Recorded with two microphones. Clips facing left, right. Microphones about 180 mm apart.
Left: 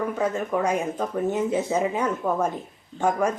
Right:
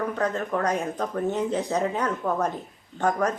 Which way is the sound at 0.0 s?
10° left (ahead or behind).